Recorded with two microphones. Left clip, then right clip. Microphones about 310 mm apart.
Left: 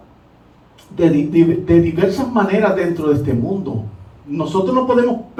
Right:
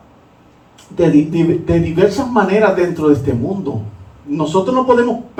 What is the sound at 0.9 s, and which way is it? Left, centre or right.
Speech, centre.